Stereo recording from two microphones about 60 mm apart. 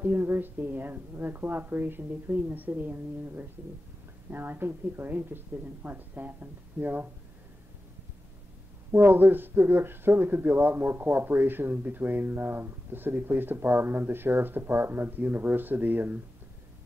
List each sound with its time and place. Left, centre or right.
0.0 s speech: right
8.9 s speech: right